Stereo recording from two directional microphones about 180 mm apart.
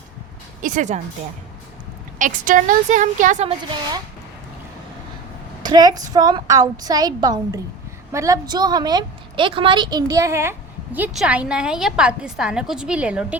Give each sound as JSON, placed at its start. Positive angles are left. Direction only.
{"t": 0.6, "sound": "a woman's voice", "side_deg": -45}
{"t": 2.1, "sound": "a woman's voice", "side_deg": -45}
{"t": 5.6, "sound": "a woman's voice", "side_deg": -20}